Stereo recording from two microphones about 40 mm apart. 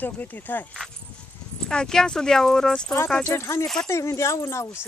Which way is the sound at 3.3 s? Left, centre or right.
Left.